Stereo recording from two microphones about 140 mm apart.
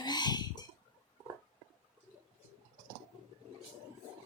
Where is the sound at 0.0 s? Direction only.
30° left (ahead or behind).